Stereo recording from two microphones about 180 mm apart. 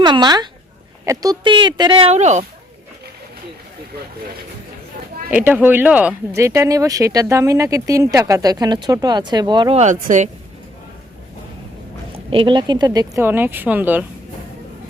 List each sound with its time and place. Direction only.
0.0 s speech: 25° right (ahead or behind)
5.3 s speech: 10° right (ahead or behind); by 9.8 s 25° right (ahead or behind)
9.8 s speech: 45° right (ahead or behind)
12.1 s speech: 30° right (ahead or behind); by 14.0 s 10° right (ahead or behind)